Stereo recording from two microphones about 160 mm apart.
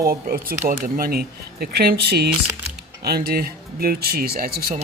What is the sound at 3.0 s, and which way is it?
Speech, 75° right (ahead or behind).